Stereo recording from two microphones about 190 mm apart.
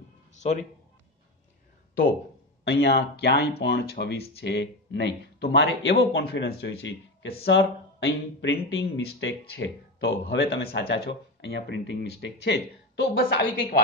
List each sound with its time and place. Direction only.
2.6 s speech: 60° left (ahead or behind)